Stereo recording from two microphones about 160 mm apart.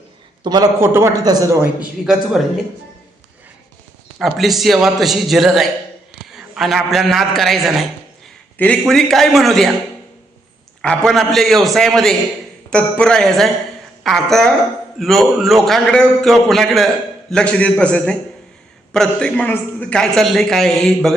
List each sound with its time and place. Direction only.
0.4 s a man's voice: 25° right (ahead or behind)
1.8 s a man's voice: 5° right (ahead or behind)
4.2 s a man's voice: centre (ahead or behind)
10.8 s a man's voice: centre (ahead or behind)